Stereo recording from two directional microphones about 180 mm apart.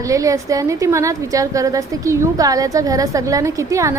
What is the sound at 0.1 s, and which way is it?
A woman's voice, 20° right (ahead or behind).